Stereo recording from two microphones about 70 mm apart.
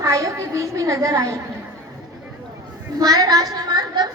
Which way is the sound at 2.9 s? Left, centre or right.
Right.